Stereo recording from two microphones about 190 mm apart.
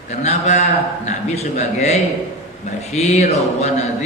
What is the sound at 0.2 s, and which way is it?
A man's voice, 35° left (ahead or behind).